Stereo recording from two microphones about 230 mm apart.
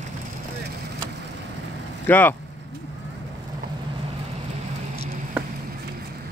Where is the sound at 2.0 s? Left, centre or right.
Centre.